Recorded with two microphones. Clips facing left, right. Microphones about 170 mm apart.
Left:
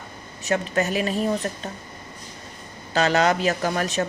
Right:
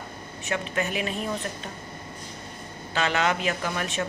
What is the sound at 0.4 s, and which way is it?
Speech, 40° left (ahead or behind).